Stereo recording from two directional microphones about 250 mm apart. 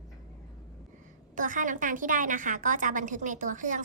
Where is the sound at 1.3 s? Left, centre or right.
Right.